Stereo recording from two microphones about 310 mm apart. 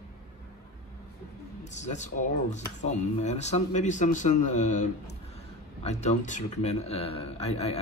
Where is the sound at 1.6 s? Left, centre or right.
Left.